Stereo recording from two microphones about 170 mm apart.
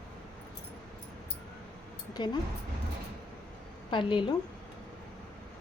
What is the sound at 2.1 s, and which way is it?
Speech, 25° left (ahead or behind).